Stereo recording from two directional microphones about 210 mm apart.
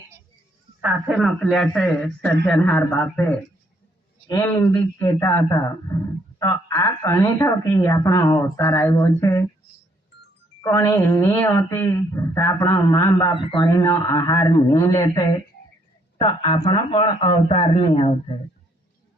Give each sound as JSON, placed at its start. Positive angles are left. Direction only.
{"t": 0.8, "sound": "a man's voice", "side_deg": -5}
{"t": 10.6, "sound": "speech", "side_deg": 15}